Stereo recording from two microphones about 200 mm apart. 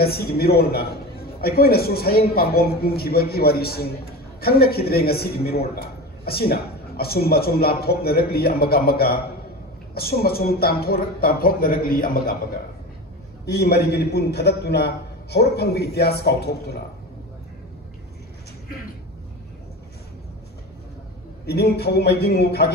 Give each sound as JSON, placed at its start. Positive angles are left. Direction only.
{"t": 0.0, "sound": "a man's voice", "side_deg": 50}
{"t": 13.5, "sound": "a man's voice", "side_deg": 55}
{"t": 21.5, "sound": "a man's voice", "side_deg": 55}